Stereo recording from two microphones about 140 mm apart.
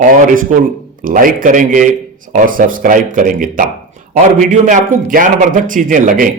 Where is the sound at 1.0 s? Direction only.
80° right.